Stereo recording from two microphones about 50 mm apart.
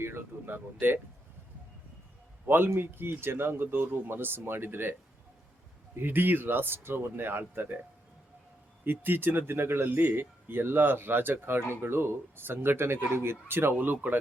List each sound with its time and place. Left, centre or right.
0.0 s speech: right
2.5 s speech: right
6.0 s speech: right
8.8 s speech: right
13.7 s speech: right